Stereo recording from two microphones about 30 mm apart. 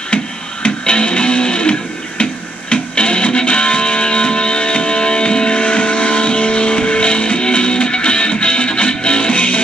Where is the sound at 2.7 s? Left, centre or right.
Left.